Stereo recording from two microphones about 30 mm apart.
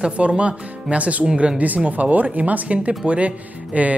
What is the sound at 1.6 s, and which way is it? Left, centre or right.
Speech, right.